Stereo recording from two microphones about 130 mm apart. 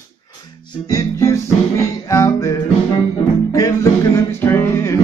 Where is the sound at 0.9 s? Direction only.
25° left (ahead or behind).